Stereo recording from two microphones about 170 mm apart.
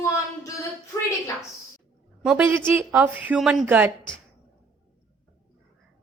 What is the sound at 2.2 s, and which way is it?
A woman's voice, 10° right (ahead or behind).